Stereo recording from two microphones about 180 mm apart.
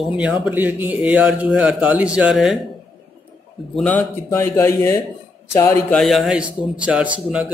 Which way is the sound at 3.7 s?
5° left (ahead or behind).